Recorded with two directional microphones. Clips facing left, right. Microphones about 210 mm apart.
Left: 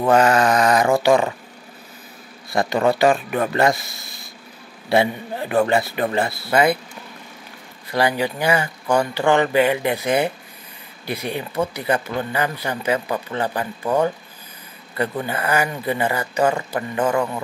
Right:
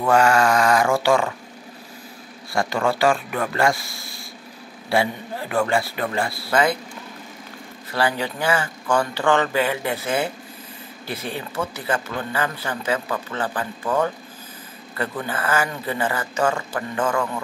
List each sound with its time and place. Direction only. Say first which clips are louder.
0.0 s speech: left 2 dB; 20° left (ahead or behind)
2.5 s speech: left 3 dB; 20° left (ahead or behind)
7.9 s speech: left 3 dB; 15° left (ahead or behind)